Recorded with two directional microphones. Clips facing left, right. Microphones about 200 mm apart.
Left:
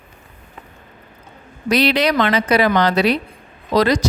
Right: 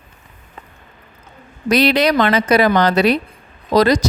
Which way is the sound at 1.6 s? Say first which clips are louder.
Right 2 dB; 45° right (ahead or behind).